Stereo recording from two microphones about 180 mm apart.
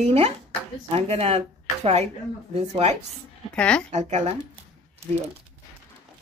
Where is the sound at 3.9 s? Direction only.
40° right (ahead or behind).